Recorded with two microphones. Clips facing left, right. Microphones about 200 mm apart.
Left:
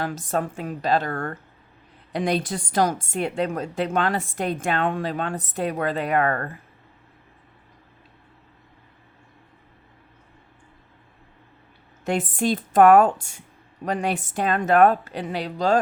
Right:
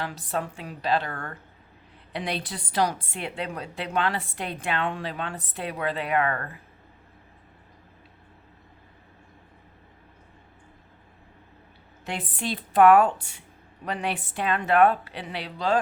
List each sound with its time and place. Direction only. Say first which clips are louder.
0.0 s a woman's voice: left 5 dB; 45° left (ahead or behind)
12.0 s a woman's voice: left 9 dB; 45° left (ahead or behind)